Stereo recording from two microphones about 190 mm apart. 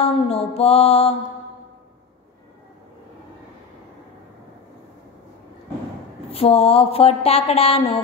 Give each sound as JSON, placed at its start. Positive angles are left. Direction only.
{"t": 0.0, "sound": "speech", "side_deg": 30}
{"t": 6.3, "sound": "speech", "side_deg": 30}